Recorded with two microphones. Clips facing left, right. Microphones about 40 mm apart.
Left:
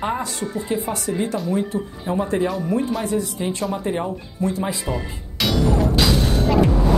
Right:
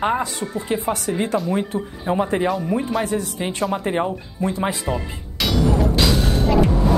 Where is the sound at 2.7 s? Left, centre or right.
Centre.